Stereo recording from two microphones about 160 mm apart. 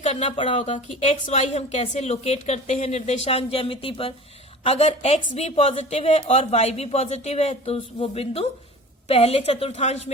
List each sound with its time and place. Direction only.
0.0 s a woman's voice: 40° left (ahead or behind)